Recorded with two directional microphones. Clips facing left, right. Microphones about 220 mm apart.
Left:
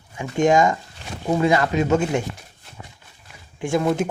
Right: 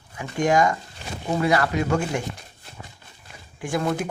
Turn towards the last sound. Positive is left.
turn(degrees=25)  # may be behind; listen again after turning